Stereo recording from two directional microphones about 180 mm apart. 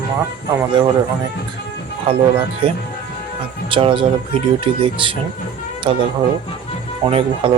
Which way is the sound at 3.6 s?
30° right (ahead or behind).